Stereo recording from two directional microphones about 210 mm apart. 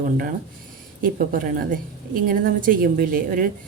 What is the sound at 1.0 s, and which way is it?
A woman's voice, 40° right (ahead or behind).